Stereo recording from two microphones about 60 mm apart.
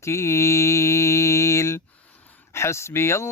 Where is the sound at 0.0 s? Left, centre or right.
Left.